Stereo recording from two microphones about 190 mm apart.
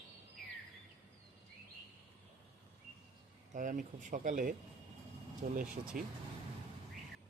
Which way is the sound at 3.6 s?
45° right (ahead or behind).